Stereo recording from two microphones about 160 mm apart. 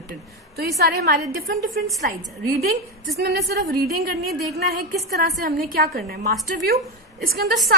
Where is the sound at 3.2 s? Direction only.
90° right.